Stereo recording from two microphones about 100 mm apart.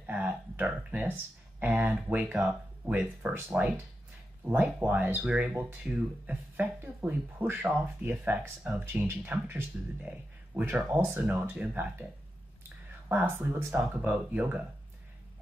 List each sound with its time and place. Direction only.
0.0 s a sound: 15° right (ahead or behind)
1.6 s speech: 20° right (ahead or behind)
2.3 s speech: 5° right (ahead or behind)
13.1 s speech: 20° right (ahead or behind)